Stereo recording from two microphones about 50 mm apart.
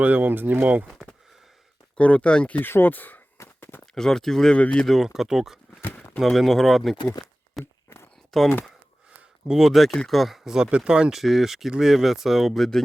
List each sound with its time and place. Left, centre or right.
0.0 s speech: right
0.6 s speech: right
2.0 s speech: left
2.6 s speech: left
3.6 s a sound: left
3.9 s speech: centre
4.5 s speech: left
5.0 s speech: centre
7.6 s a sound: left
8.3 s speech: centre
9.5 s speech: centre
9.7 s speech: centre
11.1 s speech: centre
12.5 s speech: centre